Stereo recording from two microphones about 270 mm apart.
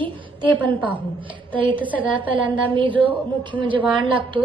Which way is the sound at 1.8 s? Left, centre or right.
Centre.